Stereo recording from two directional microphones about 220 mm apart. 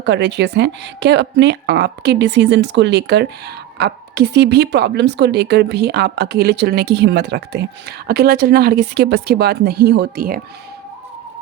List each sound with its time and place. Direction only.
0.0 s speech: 50° right (ahead or behind)